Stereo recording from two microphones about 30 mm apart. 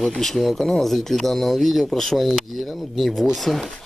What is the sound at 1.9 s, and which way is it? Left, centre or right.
Speech, centre.